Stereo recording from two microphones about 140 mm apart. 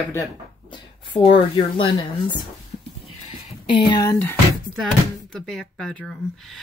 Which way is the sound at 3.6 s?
35° left (ahead or behind).